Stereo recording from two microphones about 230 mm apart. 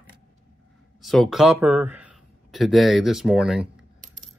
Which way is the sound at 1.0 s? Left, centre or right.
Centre.